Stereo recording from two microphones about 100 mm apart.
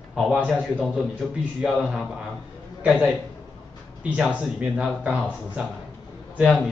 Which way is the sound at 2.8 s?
10° right (ahead or behind).